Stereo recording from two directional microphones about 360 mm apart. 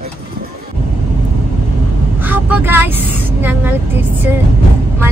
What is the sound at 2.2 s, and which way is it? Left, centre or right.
Vehicle, centre.